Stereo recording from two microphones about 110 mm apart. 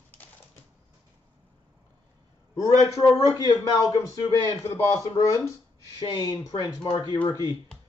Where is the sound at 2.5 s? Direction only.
30° left (ahead or behind).